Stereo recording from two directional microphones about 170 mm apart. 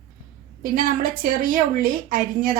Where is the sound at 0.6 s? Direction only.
55° right (ahead or behind).